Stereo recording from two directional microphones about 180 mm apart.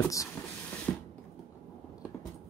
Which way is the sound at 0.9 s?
10° left (ahead or behind).